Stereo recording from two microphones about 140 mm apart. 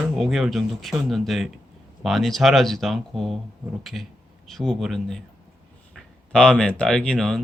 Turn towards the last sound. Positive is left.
turn(degrees=5)  # may be behind; listen again after turning